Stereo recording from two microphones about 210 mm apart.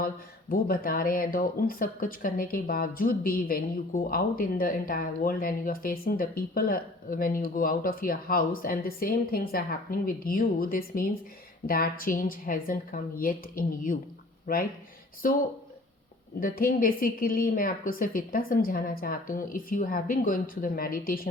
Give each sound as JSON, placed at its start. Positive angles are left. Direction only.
{"t": 0.5, "sound": "a woman's voice", "side_deg": 45}
{"t": 16.4, "sound": "speech", "side_deg": 40}